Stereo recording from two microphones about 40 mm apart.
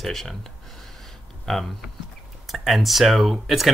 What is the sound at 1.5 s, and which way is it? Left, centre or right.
Speech, centre.